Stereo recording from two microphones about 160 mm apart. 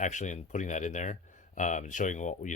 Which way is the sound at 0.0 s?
50° left (ahead or behind).